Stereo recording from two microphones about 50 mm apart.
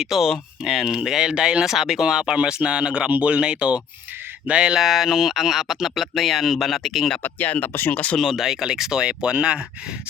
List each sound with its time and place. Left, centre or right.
0.0 s speech: centre
1.6 s speech: centre
4.8 s speech: centre
7.2 s speech: left
8.2 s speech: centre